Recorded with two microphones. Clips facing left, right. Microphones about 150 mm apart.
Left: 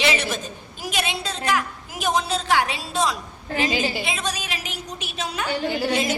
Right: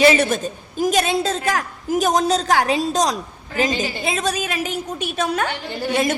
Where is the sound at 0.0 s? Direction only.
45° right (ahead or behind).